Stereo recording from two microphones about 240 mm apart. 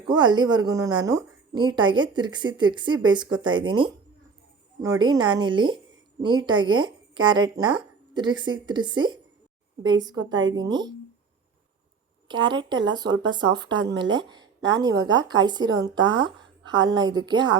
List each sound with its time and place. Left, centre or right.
0.1 s a woman's voice: centre
12.3 s speech: centre